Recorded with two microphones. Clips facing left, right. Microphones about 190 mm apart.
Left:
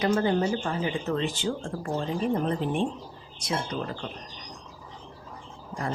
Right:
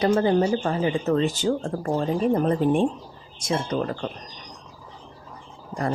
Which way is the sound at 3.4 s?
50° right (ahead or behind).